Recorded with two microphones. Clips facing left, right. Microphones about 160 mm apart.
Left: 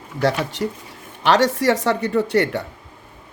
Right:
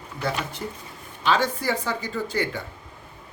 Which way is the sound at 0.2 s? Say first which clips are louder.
Left 8 dB; 85° left.